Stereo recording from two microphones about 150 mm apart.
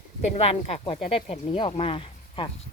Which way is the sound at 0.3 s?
45° left (ahead or behind).